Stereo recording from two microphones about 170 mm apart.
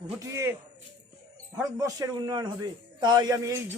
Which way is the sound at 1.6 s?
20° right (ahead or behind).